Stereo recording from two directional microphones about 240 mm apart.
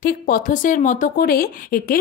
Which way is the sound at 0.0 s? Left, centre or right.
Left.